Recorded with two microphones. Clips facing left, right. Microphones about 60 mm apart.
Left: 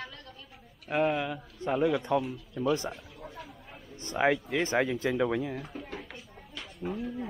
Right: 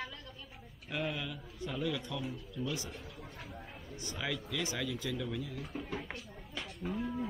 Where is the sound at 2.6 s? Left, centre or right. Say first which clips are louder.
Left 10 dB; left.